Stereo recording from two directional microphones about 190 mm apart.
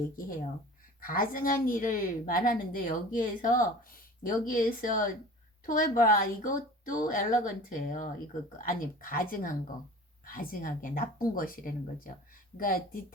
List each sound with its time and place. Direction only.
1.0 s a woman's voice: 50° left (ahead or behind)